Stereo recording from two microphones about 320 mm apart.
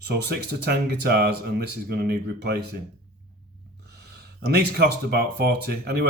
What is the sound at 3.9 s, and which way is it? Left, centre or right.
Speech, right.